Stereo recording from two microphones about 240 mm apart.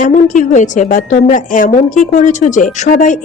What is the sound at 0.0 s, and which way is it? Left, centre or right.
A woman's voice, left.